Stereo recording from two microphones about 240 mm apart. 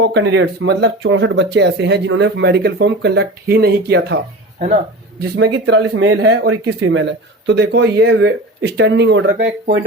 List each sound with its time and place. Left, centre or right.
0.0 s speech: right
5.2 s speech: right